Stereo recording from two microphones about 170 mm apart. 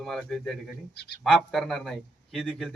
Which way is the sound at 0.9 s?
75° left (ahead or behind).